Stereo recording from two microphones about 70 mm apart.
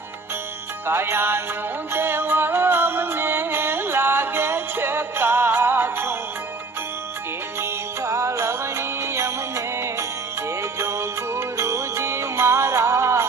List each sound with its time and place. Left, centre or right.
0.9 s music: right
7.6 s music: right